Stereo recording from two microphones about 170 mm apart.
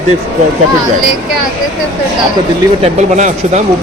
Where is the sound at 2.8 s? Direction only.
45° right (ahead or behind).